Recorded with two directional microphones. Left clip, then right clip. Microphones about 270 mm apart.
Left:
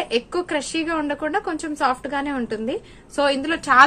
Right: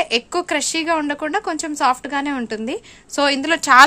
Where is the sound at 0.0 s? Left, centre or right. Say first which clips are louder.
Right 3 dB; right.